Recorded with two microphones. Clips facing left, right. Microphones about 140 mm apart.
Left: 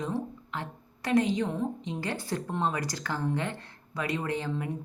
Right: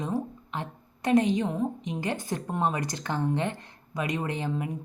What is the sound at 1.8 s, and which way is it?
Speech, 20° right (ahead or behind).